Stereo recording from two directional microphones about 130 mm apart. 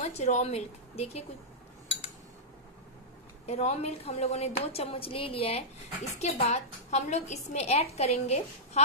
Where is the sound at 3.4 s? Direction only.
55° left (ahead or behind).